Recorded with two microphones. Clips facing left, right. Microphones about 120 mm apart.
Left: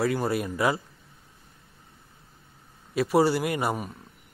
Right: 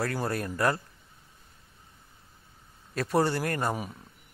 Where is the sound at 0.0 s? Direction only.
Centre (ahead or behind).